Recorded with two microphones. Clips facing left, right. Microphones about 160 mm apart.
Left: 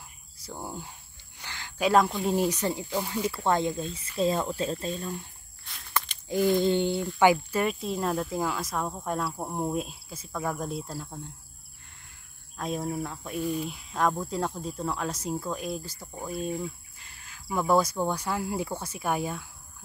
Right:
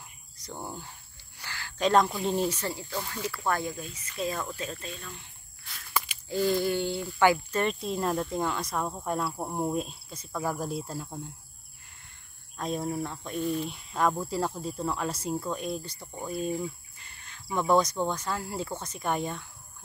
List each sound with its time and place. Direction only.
0.4 s speech: 5° left (ahead or behind)
1.4 s a sound: 20° left (ahead or behind)
1.8 s speech: 5° left (ahead or behind)
2.3 s speech: 15° left (ahead or behind); by 5.3 s 40° left (ahead or behind)
5.7 s a sound: 5° right (ahead or behind)
6.2 s speech: 15° left (ahead or behind)
7.6 s speech: centre (ahead or behind)
12.5 s speech: centre (ahead or behind)